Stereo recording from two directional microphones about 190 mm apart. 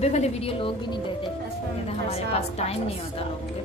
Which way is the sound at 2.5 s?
35° left (ahead or behind).